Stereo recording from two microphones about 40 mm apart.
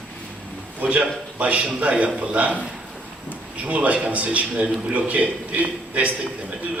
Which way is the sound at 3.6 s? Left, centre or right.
Right.